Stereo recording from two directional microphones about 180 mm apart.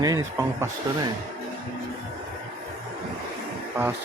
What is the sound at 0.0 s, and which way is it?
Speech, 20° right (ahead or behind).